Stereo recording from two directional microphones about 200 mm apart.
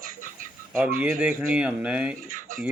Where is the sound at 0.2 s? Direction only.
40° right (ahead or behind).